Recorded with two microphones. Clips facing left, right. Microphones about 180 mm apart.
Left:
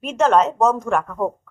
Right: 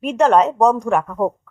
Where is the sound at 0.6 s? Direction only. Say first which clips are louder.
Right 3 dB; 15° right (ahead or behind).